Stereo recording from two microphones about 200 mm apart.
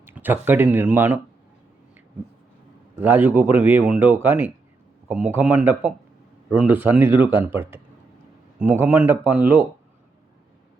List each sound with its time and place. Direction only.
0.0 s speech: 10° right (ahead or behind)
3.0 s speech: 10° right (ahead or behind)